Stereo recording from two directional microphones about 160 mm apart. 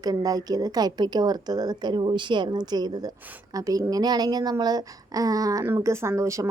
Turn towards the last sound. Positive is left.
turn(degrees=-20)  # may be behind; listen again after turning